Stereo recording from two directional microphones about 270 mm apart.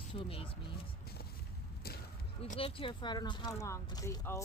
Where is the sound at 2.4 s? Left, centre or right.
Left.